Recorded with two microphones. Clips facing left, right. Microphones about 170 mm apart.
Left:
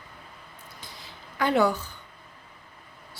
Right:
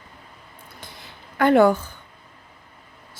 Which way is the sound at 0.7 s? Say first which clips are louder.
Right 3 dB; 55° right (ahead or behind).